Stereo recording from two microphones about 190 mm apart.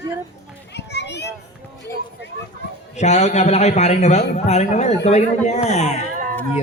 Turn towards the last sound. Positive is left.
turn(degrees=-45)  # may be behind; listen again after turning